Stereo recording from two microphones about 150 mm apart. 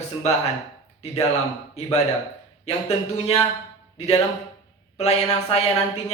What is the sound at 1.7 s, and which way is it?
Speech, 45° left (ahead or behind).